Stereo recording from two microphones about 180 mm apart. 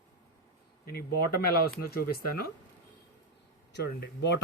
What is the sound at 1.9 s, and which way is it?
Speech, 55° left (ahead or behind).